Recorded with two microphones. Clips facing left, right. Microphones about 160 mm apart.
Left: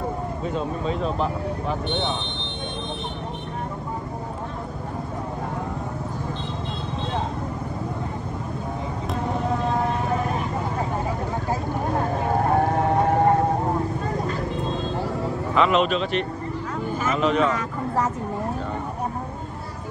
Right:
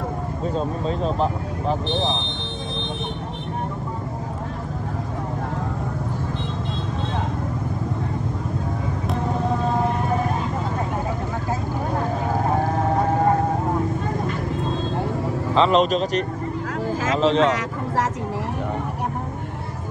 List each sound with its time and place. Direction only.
0.6 s speech: 35° right (ahead or behind)
15.5 s speech: 35° right (ahead or behind)
16.8 s vehicle: 90° right
17.4 s a sound: 90° right